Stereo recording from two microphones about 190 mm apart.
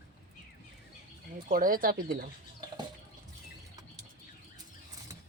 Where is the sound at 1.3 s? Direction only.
45° right (ahead or behind).